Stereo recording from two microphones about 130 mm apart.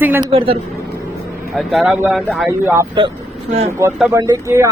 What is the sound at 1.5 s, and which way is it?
Speech, centre (ahead or behind).